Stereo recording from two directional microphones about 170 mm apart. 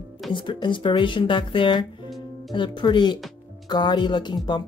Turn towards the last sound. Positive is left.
turn(degrees=25)  # may be behind; listen again after turning